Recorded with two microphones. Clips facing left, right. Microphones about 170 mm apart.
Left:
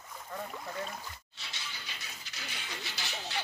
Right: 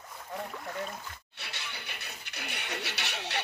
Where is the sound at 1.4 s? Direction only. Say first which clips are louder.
Right 4 dB; 65° right (ahead or behind).